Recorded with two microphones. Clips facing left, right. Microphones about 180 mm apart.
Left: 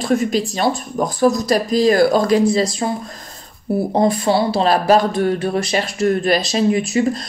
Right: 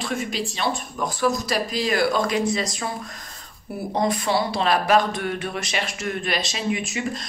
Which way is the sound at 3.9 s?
30° left (ahead or behind).